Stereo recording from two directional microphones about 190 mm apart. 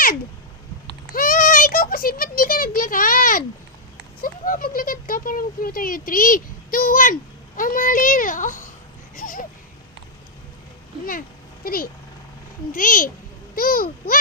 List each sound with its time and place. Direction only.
1.1 s a child's voice: 45° left (ahead or behind)
9.1 s a sound: 45° left (ahead or behind)
11.6 s speech: 50° left (ahead or behind)